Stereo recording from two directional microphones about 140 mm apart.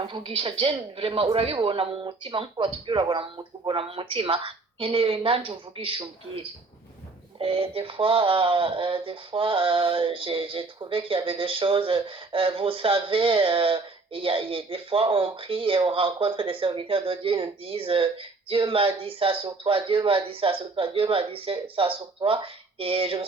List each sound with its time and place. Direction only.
0.0 s speech: 35° right (ahead or behind)